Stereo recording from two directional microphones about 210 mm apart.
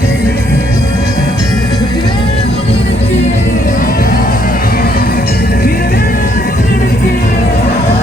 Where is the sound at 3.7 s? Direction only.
40° left (ahead or behind).